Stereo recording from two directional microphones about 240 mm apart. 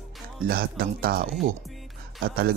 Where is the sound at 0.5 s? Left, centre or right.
Right.